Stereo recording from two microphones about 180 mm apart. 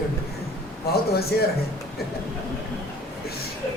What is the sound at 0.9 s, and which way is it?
Speech, 60° left (ahead or behind).